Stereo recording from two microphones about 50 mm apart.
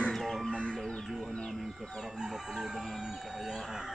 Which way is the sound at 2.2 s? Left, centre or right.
Centre.